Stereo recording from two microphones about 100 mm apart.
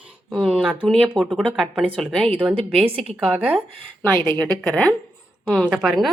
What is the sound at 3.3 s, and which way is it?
Speech, 15° right (ahead or behind).